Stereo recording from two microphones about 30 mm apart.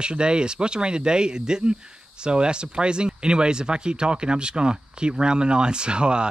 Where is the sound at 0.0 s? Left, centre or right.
Right.